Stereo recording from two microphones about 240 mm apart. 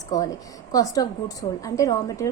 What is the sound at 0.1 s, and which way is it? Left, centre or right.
A woman's voice, centre.